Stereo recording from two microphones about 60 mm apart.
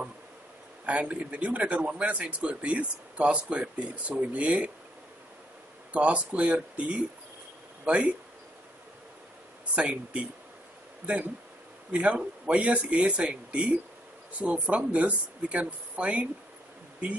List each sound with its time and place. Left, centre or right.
0.8 s speech: right
5.9 s speech: centre
9.8 s speech: centre
11.9 s speech: centre